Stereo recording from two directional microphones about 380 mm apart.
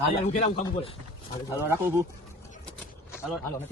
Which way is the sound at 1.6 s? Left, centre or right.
Centre.